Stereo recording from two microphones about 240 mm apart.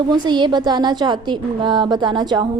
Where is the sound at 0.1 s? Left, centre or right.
Centre.